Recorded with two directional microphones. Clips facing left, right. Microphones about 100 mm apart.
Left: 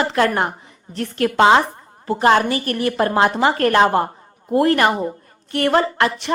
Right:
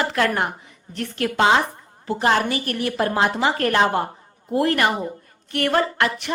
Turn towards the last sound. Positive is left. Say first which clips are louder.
# left 3 dB
turn(degrees=30)  # may be behind; listen again after turning